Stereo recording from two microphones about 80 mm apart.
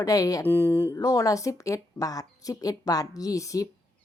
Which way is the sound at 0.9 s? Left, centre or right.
Left.